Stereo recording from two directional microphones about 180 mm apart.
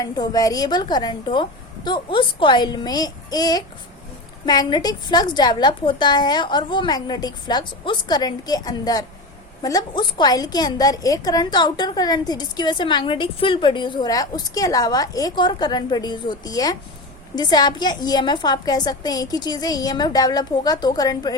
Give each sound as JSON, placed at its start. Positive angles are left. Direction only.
{"t": 0.0, "sound": "a woman's voice", "side_deg": 20}